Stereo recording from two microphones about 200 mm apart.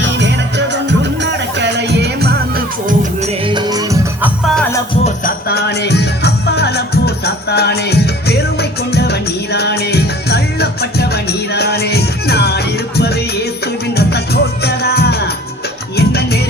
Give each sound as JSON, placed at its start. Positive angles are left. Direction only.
{"t": 0.2, "sound": "music", "side_deg": -60}
{"t": 3.4, "sound": "music", "side_deg": -20}
{"t": 5.0, "sound": "music", "side_deg": 45}